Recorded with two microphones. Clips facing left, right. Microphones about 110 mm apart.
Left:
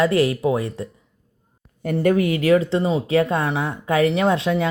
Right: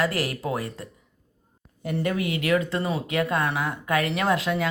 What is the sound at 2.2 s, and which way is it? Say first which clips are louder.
Speech: left 7 dB; 40° left (ahead or behind).